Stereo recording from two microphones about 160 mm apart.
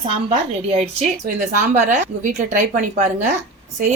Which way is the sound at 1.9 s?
55° right (ahead or behind).